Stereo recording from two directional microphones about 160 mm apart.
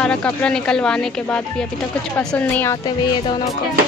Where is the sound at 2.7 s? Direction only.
25° left (ahead or behind).